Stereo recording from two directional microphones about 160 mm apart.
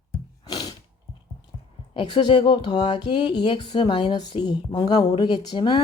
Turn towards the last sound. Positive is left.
turn(degrees=25)  # may be behind; listen again after turning